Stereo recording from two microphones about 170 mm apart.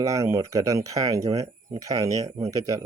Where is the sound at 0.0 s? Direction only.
20° right (ahead or behind).